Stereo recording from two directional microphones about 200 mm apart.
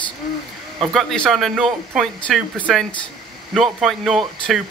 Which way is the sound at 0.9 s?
Centre (ahead or behind).